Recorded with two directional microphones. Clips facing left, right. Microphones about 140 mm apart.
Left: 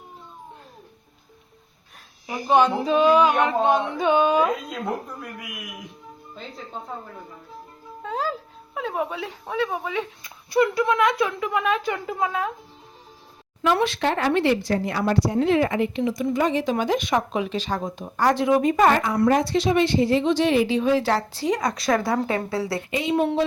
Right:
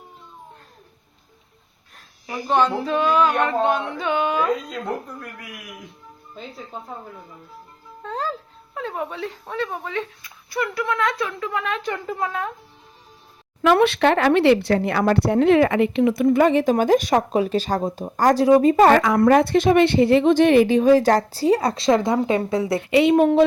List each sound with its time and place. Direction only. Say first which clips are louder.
2.2 s speech: left 1 dB; 15° left (ahead or behind)
8.0 s music: even; 5° left (ahead or behind)
8.7 s speech: left 1 dB; 10° left (ahead or behind)
10.2 s speech: left 6 dB; 20° left (ahead or behind)
13.6 s speech: right 5 dB; 65° right (ahead or behind); by 18.9 s 35° right (ahead or behind)
18.9 s speech: right 6 dB; 90° right
19.2 s speech: right 4 dB; 60° right (ahead or behind); by 22.8 s 20° right (ahead or behind)
22.8 s a woman's voice: right 10 dB; 75° right (ahead or behind)
23.1 s speech: right 4 dB; 55° right (ahead or behind)